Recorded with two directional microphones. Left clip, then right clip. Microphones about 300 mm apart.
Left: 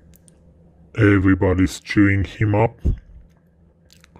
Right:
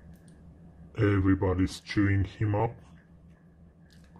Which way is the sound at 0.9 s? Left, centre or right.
Left.